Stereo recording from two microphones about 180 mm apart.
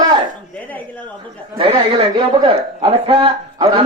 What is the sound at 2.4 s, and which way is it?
A man's voice, 30° right (ahead or behind).